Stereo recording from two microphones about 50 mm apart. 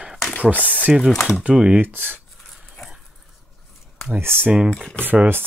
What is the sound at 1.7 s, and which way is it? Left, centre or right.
Speech, right.